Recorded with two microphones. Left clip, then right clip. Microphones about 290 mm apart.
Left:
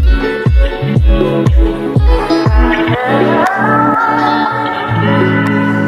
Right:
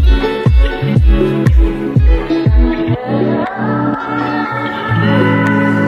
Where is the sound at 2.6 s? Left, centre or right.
Left.